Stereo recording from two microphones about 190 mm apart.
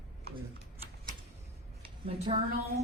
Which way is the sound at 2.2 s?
25° right (ahead or behind).